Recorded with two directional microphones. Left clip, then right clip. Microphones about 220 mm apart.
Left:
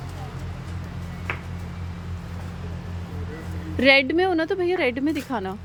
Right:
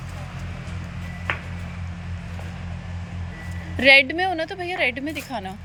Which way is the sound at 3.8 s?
10° left (ahead or behind).